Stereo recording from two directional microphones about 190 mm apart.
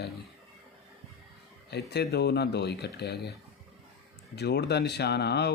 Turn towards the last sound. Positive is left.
turn(degrees=60)  # may be behind; listen again after turning